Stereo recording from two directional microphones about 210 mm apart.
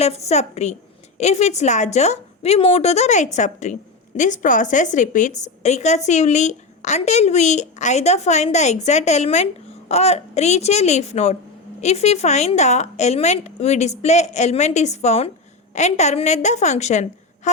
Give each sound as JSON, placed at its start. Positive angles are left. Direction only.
{"t": 0.0, "sound": "a woman's voice", "side_deg": 30}